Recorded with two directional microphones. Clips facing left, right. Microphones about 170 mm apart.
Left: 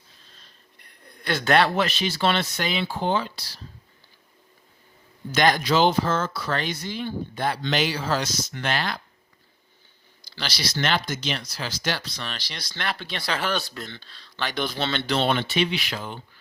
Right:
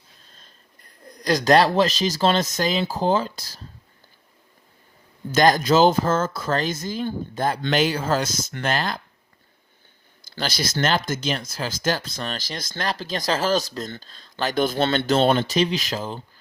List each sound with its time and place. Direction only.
1.0 s speech: 40° right (ahead or behind)
5.3 s speech: 40° right (ahead or behind)
10.2 s speech: 50° right (ahead or behind)